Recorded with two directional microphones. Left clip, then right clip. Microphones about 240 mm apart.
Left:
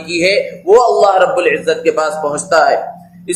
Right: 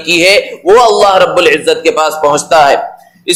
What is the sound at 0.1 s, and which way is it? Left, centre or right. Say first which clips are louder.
A man's voice: right 6 dB; right.